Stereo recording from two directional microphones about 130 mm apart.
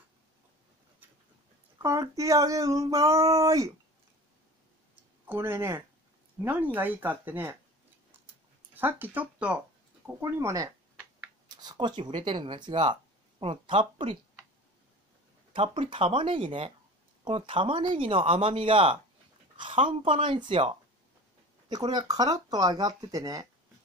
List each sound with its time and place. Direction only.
1.8 s speech: 25° right (ahead or behind)
5.2 s speech: 20° right (ahead or behind)
8.7 s speech: 15° right (ahead or behind)
10.0 s speech: 20° right (ahead or behind); by 14.1 s 40° right (ahead or behind)
15.5 s speech: 45° right (ahead or behind); by 23.4 s 30° right (ahead or behind)